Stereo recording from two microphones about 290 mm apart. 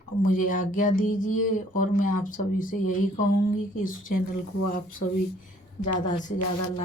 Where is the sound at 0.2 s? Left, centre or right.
Left.